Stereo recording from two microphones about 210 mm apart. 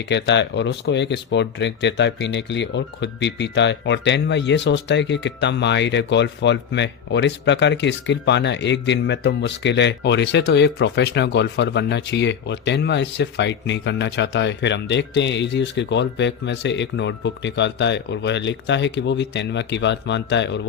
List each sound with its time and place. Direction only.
0.0 s speech: 55° left (ahead or behind)